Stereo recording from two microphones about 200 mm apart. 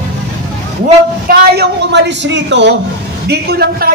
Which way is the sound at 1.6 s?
60° right (ahead or behind).